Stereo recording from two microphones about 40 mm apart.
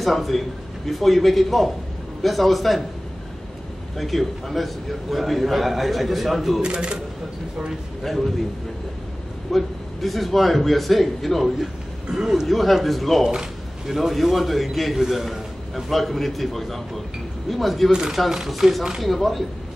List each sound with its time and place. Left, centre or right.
0.0 s a man's voice: centre
3.9 s a man's voice: centre
6.6 s speech: right
8.0 s a man's voice: centre
9.5 s a man's voice: centre
12.1 s speech: centre
12.4 s a man's voice: centre
18.6 s a man's voice: centre